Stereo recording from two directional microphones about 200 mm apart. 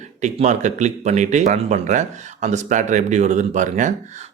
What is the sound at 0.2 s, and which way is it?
Speech, 35° right (ahead or behind).